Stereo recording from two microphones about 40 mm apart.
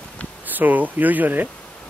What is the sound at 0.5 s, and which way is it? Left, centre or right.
Speech, right.